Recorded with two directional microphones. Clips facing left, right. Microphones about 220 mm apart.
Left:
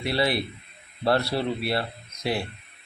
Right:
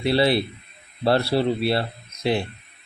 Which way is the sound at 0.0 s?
30° right (ahead or behind).